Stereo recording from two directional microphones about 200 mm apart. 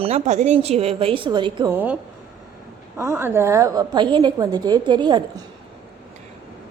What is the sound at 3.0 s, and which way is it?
A woman's voice, 10° right (ahead or behind).